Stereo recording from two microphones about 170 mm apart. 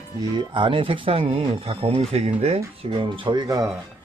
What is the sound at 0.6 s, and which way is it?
Speech, 30° right (ahead or behind).